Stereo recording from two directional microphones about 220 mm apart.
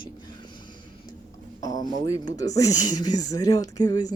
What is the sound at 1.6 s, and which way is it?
Speech, 15° left (ahead or behind).